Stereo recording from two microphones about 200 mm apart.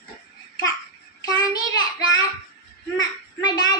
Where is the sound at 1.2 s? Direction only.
20° left (ahead or behind).